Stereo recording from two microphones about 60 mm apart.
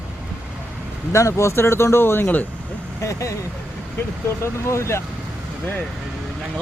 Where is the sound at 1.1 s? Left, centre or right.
Left.